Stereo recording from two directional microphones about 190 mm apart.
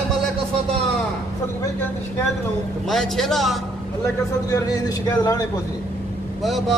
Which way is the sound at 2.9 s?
Centre (ahead or behind).